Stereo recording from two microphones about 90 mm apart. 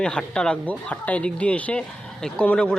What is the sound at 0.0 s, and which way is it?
Speech, 10° left (ahead or behind).